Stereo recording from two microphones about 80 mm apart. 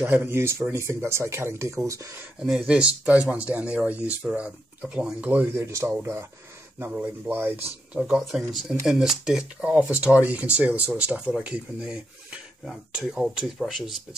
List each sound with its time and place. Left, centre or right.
0.0 s speech: right
2.4 s speech: centre
2.8 s speech: centre
5.6 s speech: right
6.8 s speech: right
8.0 s speech: centre